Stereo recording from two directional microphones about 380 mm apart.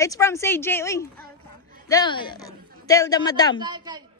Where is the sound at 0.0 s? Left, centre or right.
Centre.